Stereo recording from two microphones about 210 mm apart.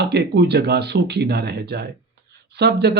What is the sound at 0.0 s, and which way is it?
A man's voice, 50° right (ahead or behind).